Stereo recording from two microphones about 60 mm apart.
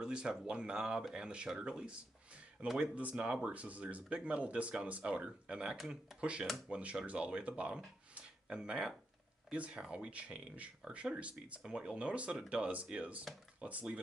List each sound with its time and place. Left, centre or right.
0.0 s speech: centre